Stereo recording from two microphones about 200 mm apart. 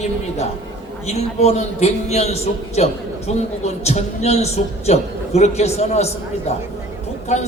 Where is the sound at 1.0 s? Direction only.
30° left (ahead or behind).